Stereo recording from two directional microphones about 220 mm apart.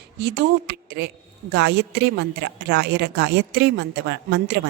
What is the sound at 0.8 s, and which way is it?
A woman's voice, 50° right (ahead or behind).